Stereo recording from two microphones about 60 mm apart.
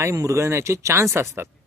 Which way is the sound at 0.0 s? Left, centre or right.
Right.